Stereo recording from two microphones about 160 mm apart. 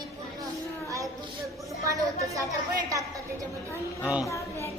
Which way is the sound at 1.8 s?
20° right (ahead or behind).